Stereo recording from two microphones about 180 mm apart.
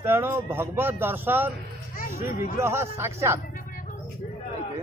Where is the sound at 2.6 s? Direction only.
15° right (ahead or behind).